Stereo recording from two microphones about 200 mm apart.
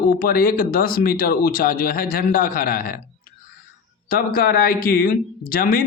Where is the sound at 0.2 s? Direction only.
45° left (ahead or behind).